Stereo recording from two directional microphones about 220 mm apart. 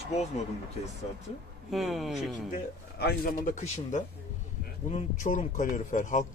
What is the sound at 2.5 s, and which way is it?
A man's voice, 45° left (ahead or behind).